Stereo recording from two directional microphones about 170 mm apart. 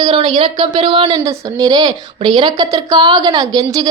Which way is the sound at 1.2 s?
20° right (ahead or behind).